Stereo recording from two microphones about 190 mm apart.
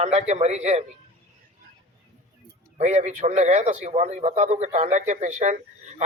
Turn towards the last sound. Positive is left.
turn(degrees=-40)  # may be behind; listen again after turning